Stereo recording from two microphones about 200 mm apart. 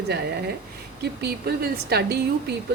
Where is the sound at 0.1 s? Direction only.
55° right (ahead or behind).